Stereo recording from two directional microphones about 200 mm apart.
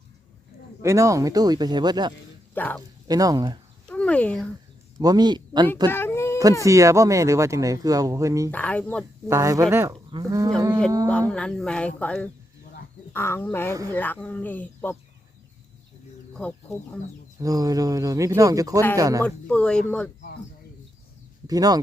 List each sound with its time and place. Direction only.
0.8 s a man's voice: 15° right (ahead or behind)
2.6 s speech: 10° left (ahead or behind)
3.1 s a man's voice: 20° right (ahead or behind)
3.8 s a sound: 5° left (ahead or behind)
4.9 s speech: 20° right (ahead or behind)
5.9 s a sound: 10° left (ahead or behind)
6.7 s speech: 15° right (ahead or behind)
8.4 s speech: 5° left (ahead or behind)
9.3 s speech: 15° right (ahead or behind)
11.1 s speech: 5° left (ahead or behind)
16.3 s speech: 5° left (ahead or behind)
17.4 s speech: 20° right (ahead or behind)
19.2 s speech: 5° left (ahead or behind)
21.4 s speech: 20° right (ahead or behind)